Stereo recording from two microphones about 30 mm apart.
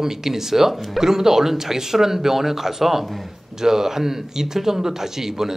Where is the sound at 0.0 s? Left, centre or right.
Centre.